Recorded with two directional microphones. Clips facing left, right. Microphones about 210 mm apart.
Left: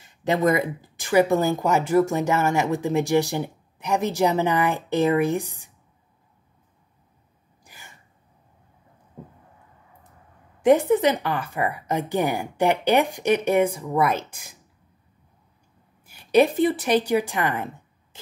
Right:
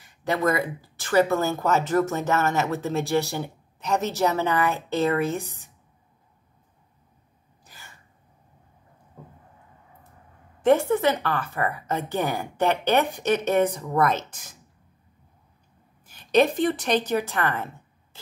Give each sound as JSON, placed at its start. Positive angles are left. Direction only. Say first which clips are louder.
{"t": 0.0, "sound": "speech", "louder": "left 3 dB", "side_deg": 20}
{"t": 7.6, "sound": "sneeze", "louder": "left 1 dB", "side_deg": 15}
{"t": 10.6, "sound": "speech", "louder": "left 2 dB", "side_deg": 15}
{"t": 16.1, "sound": "speech", "louder": "left 2 dB", "side_deg": 10}